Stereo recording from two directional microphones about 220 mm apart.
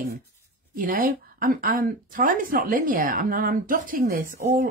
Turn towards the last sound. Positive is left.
turn(degrees=-35)  # may be behind; listen again after turning